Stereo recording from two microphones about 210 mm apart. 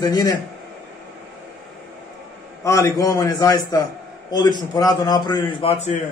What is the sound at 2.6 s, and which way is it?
A man's voice, 15° left (ahead or behind).